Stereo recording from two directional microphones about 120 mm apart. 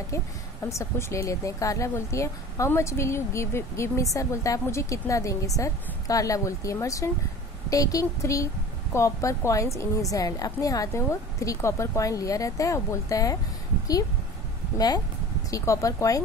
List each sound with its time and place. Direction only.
0.1 s speech: 25° left (ahead or behind)
15.5 s speech: 25° left (ahead or behind)